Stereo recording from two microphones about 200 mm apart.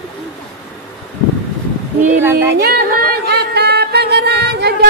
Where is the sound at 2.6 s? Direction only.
50° right (ahead or behind).